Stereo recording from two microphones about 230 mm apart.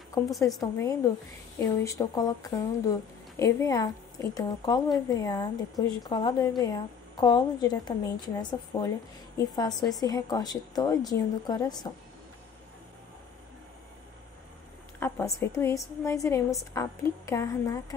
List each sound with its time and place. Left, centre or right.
0.6 s a woman's voice: centre
15.0 s speech: centre